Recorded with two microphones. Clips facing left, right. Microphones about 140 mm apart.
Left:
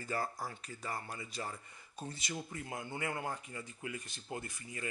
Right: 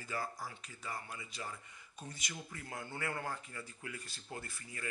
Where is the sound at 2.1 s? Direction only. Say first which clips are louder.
Left 5 dB; 30° left (ahead or behind).